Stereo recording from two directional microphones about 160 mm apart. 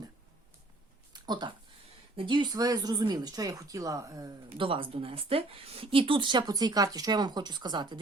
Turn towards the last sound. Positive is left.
turn(degrees=-25)  # may be behind; listen again after turning